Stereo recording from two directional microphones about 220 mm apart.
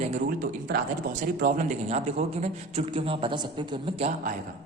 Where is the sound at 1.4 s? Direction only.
40° right (ahead or behind).